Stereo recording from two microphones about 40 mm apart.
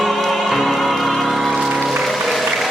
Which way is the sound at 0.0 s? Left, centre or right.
Centre.